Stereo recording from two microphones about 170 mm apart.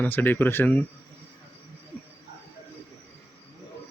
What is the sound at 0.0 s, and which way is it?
Speech, 10° left (ahead or behind).